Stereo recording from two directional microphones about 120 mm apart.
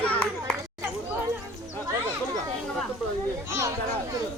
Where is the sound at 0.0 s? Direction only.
10° left (ahead or behind).